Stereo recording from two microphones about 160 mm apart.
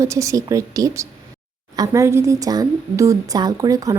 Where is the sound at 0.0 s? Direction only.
20° right (ahead or behind).